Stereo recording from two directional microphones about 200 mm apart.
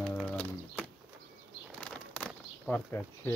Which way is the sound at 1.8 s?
5° left (ahead or behind).